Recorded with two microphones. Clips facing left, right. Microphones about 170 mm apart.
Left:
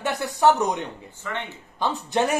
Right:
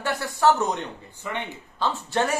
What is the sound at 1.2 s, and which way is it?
Speech, 15° right (ahead or behind).